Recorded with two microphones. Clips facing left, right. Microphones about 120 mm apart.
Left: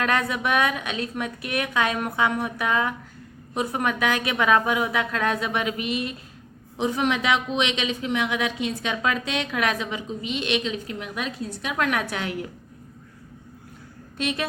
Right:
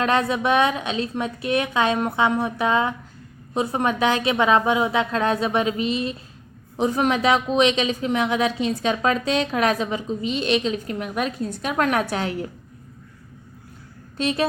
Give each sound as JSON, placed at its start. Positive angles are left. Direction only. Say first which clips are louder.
{"t": 0.0, "sound": "a woman's voice", "louder": "right 4 dB", "side_deg": -25}
{"t": 6.7, "sound": "speech", "louder": "right 3 dB", "side_deg": -40}
{"t": 14.2, "sound": "speech", "louder": "right 4 dB", "side_deg": -35}